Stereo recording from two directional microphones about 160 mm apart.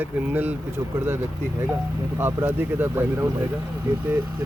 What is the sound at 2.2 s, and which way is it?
Speech, 15° right (ahead or behind).